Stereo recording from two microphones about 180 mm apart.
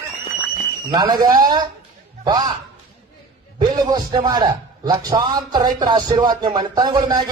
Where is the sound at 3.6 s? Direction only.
25° right (ahead or behind).